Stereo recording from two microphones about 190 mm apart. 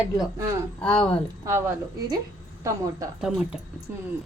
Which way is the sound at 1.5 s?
15° right (ahead or behind).